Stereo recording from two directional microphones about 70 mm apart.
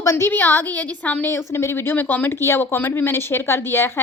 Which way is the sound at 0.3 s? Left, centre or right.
Left.